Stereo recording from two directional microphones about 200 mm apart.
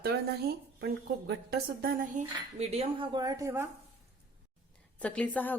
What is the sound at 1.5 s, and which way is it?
Speech, 45° right (ahead or behind).